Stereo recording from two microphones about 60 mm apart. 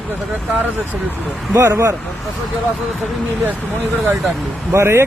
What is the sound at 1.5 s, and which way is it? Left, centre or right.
Speech, right.